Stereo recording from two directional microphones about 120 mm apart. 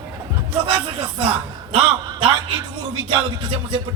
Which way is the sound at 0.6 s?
50° right (ahead or behind).